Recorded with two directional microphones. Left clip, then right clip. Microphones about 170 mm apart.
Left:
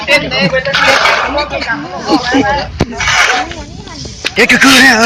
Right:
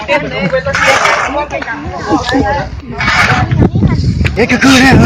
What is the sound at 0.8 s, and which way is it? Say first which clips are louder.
Speech: even; 45° left (ahead or behind).